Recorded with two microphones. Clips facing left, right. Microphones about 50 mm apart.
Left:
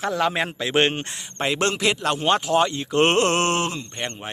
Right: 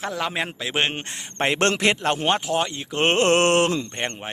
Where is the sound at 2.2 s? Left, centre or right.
Centre.